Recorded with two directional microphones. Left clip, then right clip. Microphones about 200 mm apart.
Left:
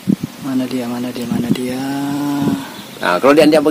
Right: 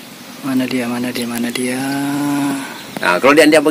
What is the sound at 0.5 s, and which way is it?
Speech, centre (ahead or behind).